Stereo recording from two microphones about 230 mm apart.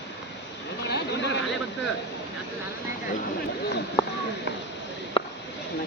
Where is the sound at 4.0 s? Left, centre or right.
Centre.